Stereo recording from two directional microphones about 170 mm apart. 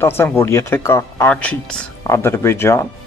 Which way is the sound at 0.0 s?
15° left (ahead or behind).